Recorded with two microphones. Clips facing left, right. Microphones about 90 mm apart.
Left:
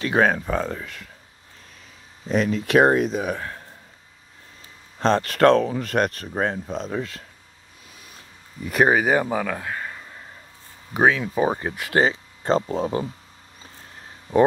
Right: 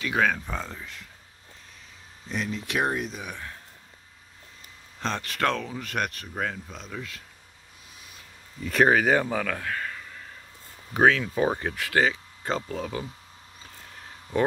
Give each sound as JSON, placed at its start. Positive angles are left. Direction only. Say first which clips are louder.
{"t": 0.0, "sound": "speech", "louder": "left 5 dB", "side_deg": 40}
{"t": 0.4, "sound": "speech", "louder": "left 9 dB", "side_deg": 55}
{"t": 2.2, "sound": "speech", "louder": "left 9 dB", "side_deg": 45}
{"t": 4.9, "sound": "speech", "louder": "left 10 dB", "side_deg": 40}
{"t": 8.6, "sound": "speech", "louder": "left 2 dB", "side_deg": 15}
{"t": 10.9, "sound": "speech", "louder": "left 1 dB", "side_deg": 10}
{"t": 14.3, "sound": "speech", "louder": "left 8 dB", "side_deg": 25}